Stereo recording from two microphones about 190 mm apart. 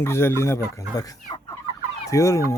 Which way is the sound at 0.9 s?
20° left (ahead or behind).